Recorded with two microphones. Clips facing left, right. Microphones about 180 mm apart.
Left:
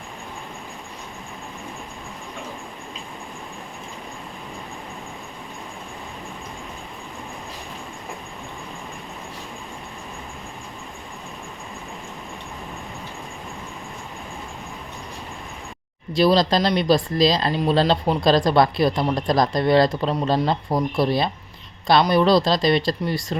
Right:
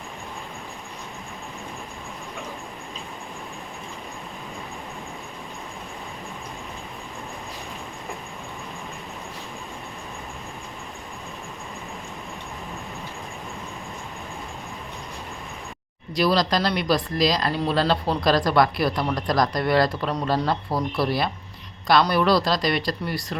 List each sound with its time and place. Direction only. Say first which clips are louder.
16.1 s speech: left 4 dB; 25° left (ahead or behind)